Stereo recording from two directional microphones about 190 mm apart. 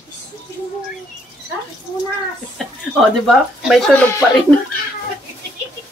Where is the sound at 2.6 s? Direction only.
Centre (ahead or behind).